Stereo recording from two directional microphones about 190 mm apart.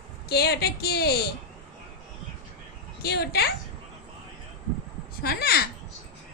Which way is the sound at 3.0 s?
55° left (ahead or behind).